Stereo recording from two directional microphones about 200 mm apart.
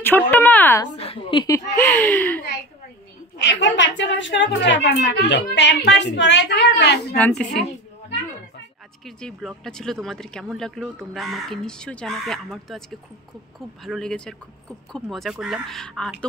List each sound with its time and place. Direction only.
0.0 s speech: 10° left (ahead or behind)
0.9 s a woman's voice: 30° left (ahead or behind)
1.8 s speech: 10° left (ahead or behind)
3.3 s a woman's voice: 65° left (ahead or behind)
7.2 s speech: 5° left (ahead or behind)
9.0 s speech: centre (ahead or behind)